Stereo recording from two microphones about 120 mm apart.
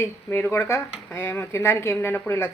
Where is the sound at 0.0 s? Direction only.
20° left (ahead or behind).